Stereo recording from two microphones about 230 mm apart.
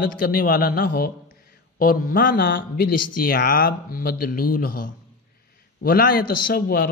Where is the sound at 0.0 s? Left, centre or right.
Left.